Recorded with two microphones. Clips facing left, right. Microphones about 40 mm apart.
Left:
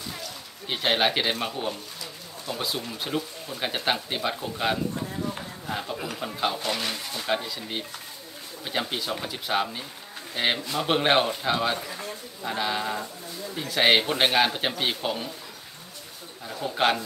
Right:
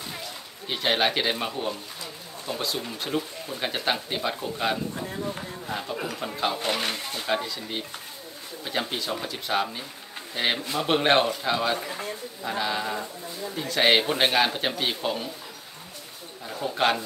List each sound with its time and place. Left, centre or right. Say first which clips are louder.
0.7 s speech: even; centre
2.5 s speech: right 1 dB; right
2.9 s speech: right 1 dB; centre
6.6 s speech: right 2 dB; right
7.2 s speech: even; centre
16.4 s a man's voice: right 1 dB; centre
16.7 s speech: even; centre